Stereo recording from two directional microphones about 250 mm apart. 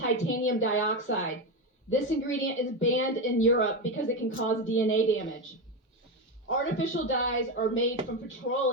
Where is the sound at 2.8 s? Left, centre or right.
Left.